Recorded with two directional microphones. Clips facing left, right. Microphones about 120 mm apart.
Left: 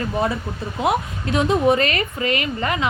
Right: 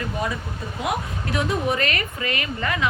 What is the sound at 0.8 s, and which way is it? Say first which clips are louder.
Speech: left 6 dB; 25° left (ahead or behind).